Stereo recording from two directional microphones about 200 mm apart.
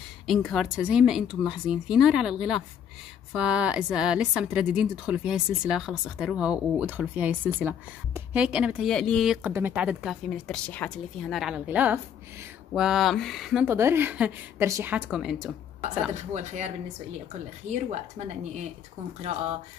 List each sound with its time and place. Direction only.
0.3 s a woman's voice: centre (ahead or behind)
16.3 s speech: 35° right (ahead or behind)
19.3 s speech: 35° right (ahead or behind)